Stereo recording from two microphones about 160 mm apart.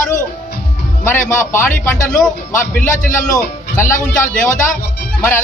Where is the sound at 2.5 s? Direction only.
55° left (ahead or behind).